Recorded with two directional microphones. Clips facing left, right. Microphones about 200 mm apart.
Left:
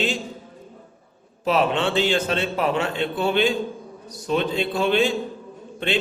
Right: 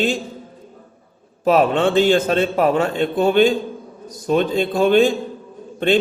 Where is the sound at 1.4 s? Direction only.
45° right (ahead or behind).